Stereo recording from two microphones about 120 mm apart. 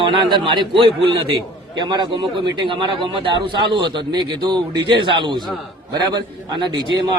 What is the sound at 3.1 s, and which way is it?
A man's voice, 45° right (ahead or behind).